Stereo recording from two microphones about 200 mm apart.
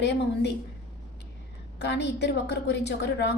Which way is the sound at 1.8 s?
60° left (ahead or behind).